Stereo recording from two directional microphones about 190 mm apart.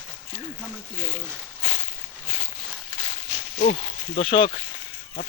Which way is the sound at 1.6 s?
35° left (ahead or behind).